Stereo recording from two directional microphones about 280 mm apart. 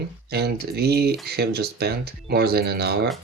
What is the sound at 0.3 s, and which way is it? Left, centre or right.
Speech, right.